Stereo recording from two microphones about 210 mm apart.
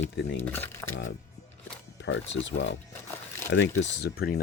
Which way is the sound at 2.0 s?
60° left (ahead or behind).